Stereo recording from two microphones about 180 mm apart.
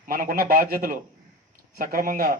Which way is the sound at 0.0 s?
50° right (ahead or behind).